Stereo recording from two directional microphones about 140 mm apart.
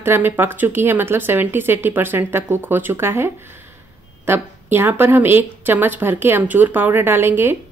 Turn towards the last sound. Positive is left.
turn(degrees=-15)  # may be behind; listen again after turning